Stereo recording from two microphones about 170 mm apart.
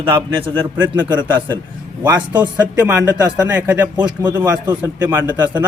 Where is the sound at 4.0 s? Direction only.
25° right (ahead or behind).